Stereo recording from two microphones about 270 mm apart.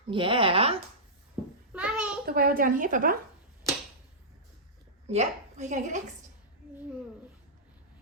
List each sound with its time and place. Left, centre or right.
0.1 s speech: centre
1.7 s a sound: centre
2.2 s a woman's voice: right
5.0 s a woman's voice: right